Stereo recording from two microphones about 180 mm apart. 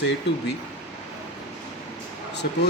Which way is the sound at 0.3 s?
70° left (ahead or behind).